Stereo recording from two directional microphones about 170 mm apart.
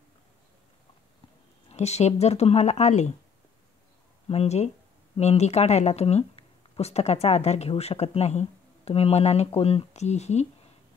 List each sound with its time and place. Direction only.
1.7 s speech: 40° left (ahead or behind)
4.3 s speech: 40° left (ahead or behind)